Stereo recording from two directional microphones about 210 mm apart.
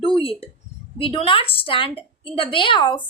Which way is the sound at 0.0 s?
25° left (ahead or behind).